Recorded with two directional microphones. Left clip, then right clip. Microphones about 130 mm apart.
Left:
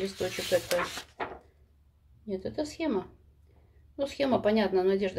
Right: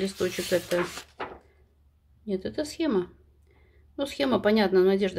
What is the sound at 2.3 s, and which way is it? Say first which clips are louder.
Speech: right 3 dB; 50° right (ahead or behind).